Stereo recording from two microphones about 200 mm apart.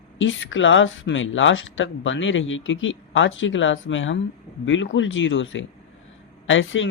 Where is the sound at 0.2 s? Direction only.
70° left (ahead or behind).